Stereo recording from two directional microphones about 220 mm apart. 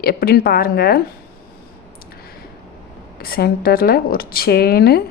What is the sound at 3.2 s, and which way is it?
Speech, 45° left (ahead or behind).